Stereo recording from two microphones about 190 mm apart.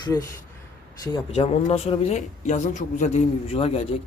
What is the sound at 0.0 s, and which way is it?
Speech, 20° left (ahead or behind).